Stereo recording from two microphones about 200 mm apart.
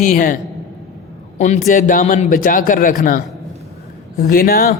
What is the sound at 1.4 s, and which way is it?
A man's voice, 35° left (ahead or behind).